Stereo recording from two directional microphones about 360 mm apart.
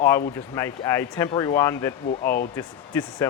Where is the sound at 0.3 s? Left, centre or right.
Centre.